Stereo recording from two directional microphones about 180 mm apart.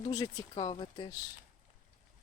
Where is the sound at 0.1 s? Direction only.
25° left (ahead or behind).